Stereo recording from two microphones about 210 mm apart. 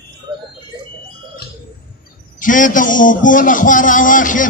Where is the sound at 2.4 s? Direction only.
40° left (ahead or behind).